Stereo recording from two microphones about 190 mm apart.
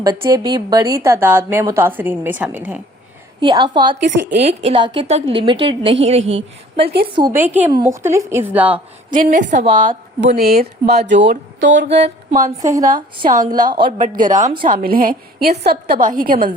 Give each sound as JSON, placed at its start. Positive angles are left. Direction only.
{"t": 0.0, "sound": "a woman's voice", "side_deg": -20}
{"t": 3.4, "sound": "a woman's voice", "side_deg": -20}
{"t": 4.2, "sound": "speech", "side_deg": -60}
{"t": 4.4, "sound": "a woman's voice", "side_deg": -30}
{"t": 7.2, "sound": "a woman's voice", "side_deg": -15}
{"t": 9.0, "sound": "a woman's voice", "side_deg": -45}
{"t": 10.3, "sound": "speech", "side_deg": -50}
{"t": 12.6, "sound": "a woman's voice", "side_deg": -20}
{"t": 14.0, "sound": "a woman's voice", "side_deg": -45}